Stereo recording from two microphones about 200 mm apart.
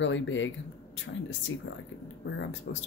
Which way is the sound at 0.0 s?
70° left (ahead or behind).